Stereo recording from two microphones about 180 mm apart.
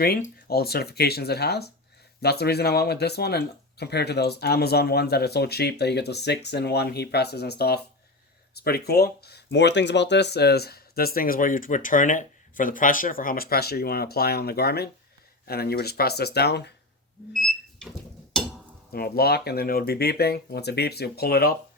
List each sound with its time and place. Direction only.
0.0 s speech: 55° left (ahead or behind)
18.3 s dishes: 5° left (ahead or behind)
18.9 s speech: 60° left (ahead or behind)